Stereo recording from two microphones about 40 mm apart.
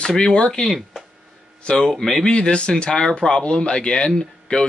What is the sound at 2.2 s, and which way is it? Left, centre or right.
Speech, left.